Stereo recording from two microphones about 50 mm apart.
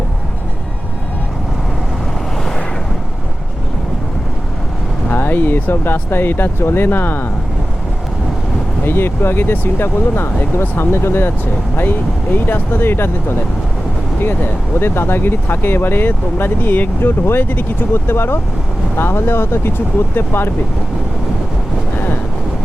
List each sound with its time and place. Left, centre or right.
5.0 s speech: left
8.8 s speech: left
17.0 s speech: left